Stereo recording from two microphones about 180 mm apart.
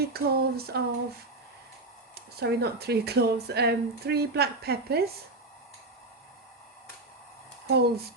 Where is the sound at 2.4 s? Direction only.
65° right (ahead or behind).